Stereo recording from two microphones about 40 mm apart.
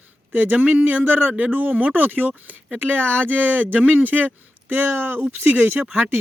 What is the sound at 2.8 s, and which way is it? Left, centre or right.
Speech, right.